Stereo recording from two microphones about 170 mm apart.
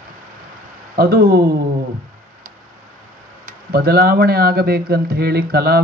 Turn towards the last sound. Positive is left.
turn(degrees=-65)  # may be behind; listen again after turning